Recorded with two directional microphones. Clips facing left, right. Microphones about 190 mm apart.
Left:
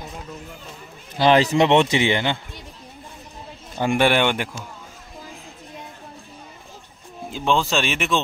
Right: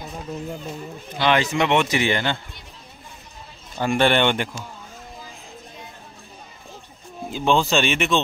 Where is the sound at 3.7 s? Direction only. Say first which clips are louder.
Even; 15° left (ahead or behind).